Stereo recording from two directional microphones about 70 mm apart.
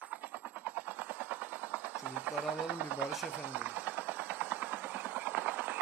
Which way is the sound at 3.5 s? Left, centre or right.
Right.